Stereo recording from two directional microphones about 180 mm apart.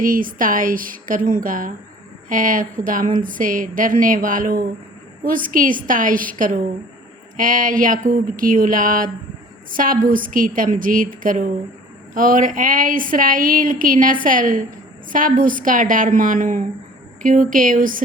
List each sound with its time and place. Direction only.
0.0 s speech: 50° right (ahead or behind)